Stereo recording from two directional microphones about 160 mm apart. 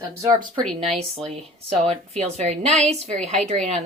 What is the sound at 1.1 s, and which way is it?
Speech, 40° right (ahead or behind).